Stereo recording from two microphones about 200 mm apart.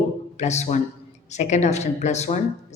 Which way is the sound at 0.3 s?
35° left (ahead or behind).